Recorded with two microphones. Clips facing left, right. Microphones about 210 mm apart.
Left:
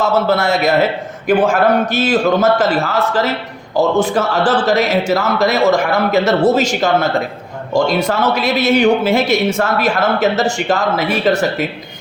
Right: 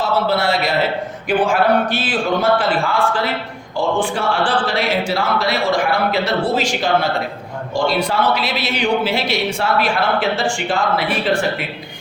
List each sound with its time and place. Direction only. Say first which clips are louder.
0.0 s a man's voice: left 3 dB; 45° left (ahead or behind)